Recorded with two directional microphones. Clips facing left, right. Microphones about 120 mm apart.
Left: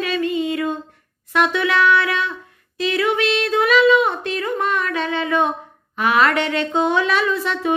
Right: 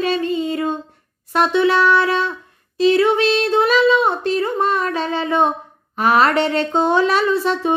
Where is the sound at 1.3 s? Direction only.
30° right (ahead or behind).